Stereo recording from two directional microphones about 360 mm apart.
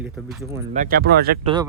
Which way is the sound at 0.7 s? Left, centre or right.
Right.